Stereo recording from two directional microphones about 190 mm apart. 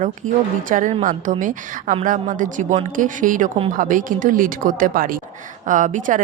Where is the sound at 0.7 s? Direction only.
45° right (ahead or behind).